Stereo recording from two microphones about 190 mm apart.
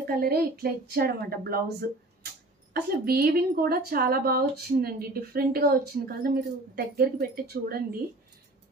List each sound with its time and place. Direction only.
0.2 s a woman's voice: 55° right (ahead or behind)